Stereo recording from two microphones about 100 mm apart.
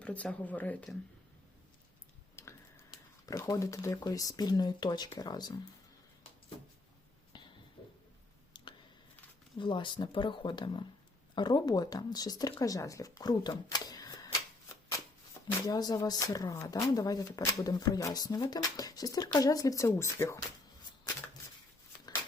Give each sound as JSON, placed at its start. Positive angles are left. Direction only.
{"t": 0.0, "sound": "speech", "side_deg": 10}
{"t": 2.3, "sound": "tick-tock", "side_deg": 30}
{"t": 2.9, "sound": "speech", "side_deg": 40}
{"t": 7.3, "sound": "a sound", "side_deg": 50}
{"t": 8.5, "sound": "a sound", "side_deg": 55}
{"t": 9.6, "sound": "speech", "side_deg": 55}
{"t": 15.6, "sound": "speech", "side_deg": 40}